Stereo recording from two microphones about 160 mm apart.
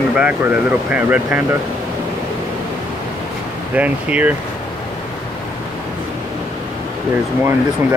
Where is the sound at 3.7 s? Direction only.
10° right (ahead or behind).